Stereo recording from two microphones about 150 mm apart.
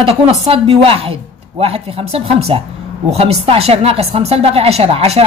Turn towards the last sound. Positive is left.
turn(degrees=-40)  # may be behind; listen again after turning